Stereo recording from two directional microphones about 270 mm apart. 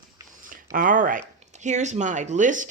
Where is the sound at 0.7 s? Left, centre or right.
Right.